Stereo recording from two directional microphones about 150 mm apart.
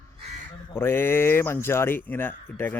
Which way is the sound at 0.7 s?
15° left (ahead or behind).